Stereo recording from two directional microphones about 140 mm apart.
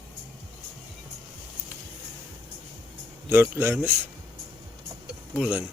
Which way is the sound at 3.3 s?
15° right (ahead or behind).